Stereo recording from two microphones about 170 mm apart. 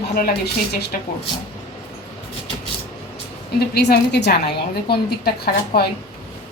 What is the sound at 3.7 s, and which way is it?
A woman's voice, 75° left (ahead or behind).